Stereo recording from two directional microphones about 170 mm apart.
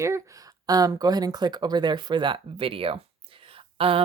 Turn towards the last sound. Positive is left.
turn(degrees=-35)  # may be behind; listen again after turning